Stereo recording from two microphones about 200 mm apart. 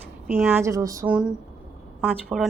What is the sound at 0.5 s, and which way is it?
Speech, 15° right (ahead or behind).